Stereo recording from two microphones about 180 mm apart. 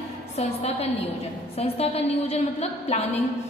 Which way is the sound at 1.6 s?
35° left (ahead or behind).